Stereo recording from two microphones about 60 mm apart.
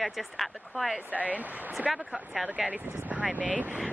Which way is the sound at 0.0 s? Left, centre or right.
Centre.